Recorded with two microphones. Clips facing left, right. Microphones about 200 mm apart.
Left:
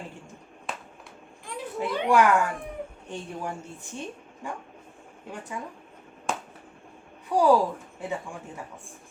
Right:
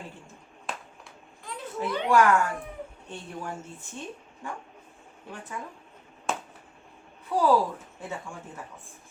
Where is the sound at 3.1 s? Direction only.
15° left (ahead or behind).